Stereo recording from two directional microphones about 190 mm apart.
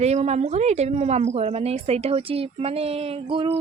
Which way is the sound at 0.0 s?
35° right (ahead or behind).